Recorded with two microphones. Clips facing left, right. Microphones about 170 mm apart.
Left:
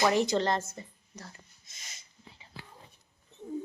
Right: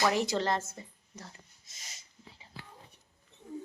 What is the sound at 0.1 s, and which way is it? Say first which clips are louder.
A woman's voice: left 3 dB; 5° right (ahead or behind).